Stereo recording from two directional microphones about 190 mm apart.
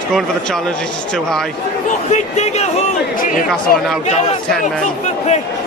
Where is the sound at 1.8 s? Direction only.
40° left (ahead or behind).